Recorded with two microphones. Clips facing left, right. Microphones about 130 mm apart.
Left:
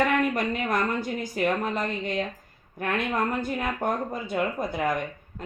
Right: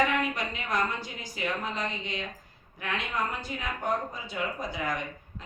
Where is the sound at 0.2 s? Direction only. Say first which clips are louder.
Left 6 dB; 55° left (ahead or behind).